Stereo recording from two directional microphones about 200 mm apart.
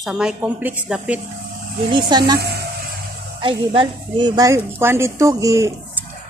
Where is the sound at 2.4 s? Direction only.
55° right (ahead or behind).